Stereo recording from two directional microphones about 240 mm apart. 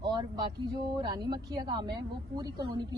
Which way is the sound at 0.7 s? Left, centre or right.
Centre.